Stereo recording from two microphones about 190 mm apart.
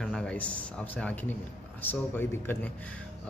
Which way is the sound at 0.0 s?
5° left (ahead or behind).